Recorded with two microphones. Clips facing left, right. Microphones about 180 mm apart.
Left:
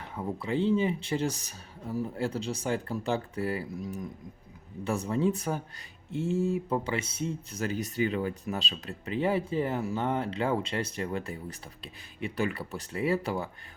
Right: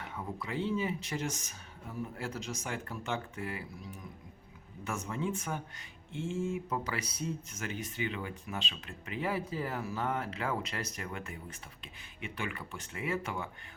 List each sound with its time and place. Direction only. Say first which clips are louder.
0.2 s speech: left 7 dB; 30° left (ahead or behind)